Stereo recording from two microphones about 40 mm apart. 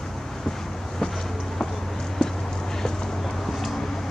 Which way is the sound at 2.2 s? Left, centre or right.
Centre.